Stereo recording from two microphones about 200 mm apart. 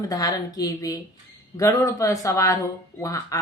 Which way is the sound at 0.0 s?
15° left (ahead or behind).